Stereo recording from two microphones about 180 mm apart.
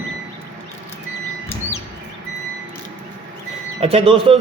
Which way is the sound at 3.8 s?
30° right (ahead or behind).